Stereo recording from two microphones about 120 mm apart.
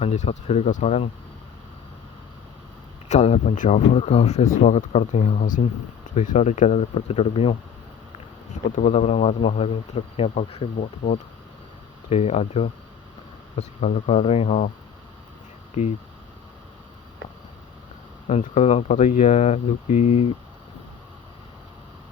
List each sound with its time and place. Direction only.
0.0 s speech: 65° left (ahead or behind)
3.1 s speech: 70° left (ahead or behind)
4.6 s speech: 70° left (ahead or behind); by 5.6 s 90° left
6.1 s speech: 70° left (ahead or behind); by 7.5 s 55° left (ahead or behind)
8.7 s speech: 80° left; by 10.7 s 60° left (ahead or behind)
10.8 s speech: 90° left
12.0 s speech: 60° left (ahead or behind)
18.3 s speech: 65° left (ahead or behind)